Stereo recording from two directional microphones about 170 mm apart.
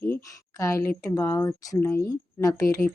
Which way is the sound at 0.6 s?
20° left (ahead or behind).